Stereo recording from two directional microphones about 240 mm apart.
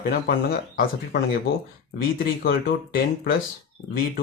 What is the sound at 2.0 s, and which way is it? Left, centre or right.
Speech, left.